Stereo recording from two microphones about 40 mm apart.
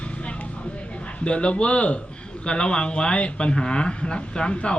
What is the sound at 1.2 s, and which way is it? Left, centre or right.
Speech, left.